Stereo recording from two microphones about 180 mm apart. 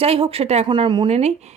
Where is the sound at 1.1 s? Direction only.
40° right (ahead or behind).